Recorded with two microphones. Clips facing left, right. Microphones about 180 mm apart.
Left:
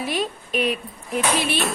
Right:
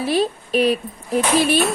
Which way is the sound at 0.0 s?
30° right (ahead or behind).